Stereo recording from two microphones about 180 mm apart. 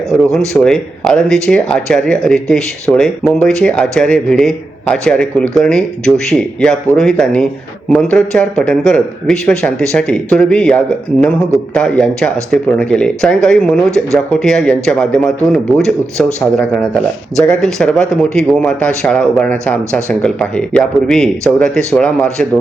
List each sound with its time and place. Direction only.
0.3 s a man's voice: 5° left (ahead or behind)